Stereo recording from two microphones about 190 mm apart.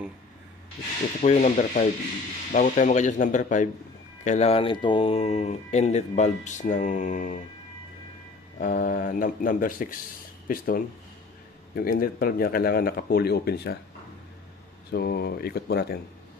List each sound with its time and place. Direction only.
1.2 s speech: 35° left (ahead or behind)
8.5 s speech: 45° left (ahead or behind)
14.9 s speech: 55° left (ahead or behind)